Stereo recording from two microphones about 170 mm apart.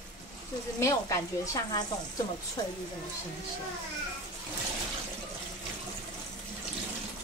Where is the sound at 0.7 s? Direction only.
20° left (ahead or behind).